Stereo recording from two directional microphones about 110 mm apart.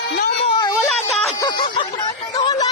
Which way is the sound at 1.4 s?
45° left (ahead or behind).